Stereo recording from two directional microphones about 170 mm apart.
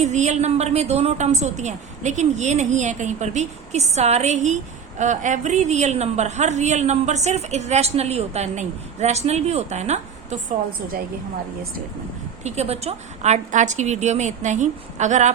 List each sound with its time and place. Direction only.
0.0 s a woman's voice: 40° right (ahead or behind)
12.4 s a woman's voice: 40° right (ahead or behind)